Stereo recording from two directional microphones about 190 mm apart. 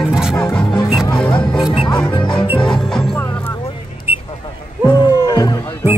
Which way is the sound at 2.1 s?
25° left (ahead or behind).